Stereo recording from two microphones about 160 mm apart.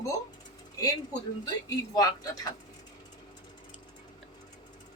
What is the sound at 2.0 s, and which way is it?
Speech, 20° left (ahead or behind).